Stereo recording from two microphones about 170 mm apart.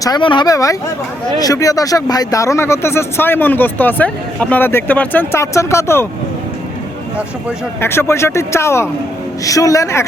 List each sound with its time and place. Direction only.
0.0 s speech: 25° left (ahead or behind)
7.8 s speech: 15° left (ahead or behind)